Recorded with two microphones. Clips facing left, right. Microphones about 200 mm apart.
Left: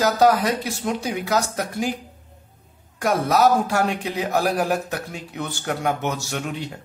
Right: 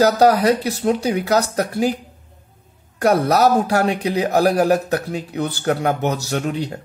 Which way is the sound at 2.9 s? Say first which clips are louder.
Right 4 dB; 40° right (ahead or behind).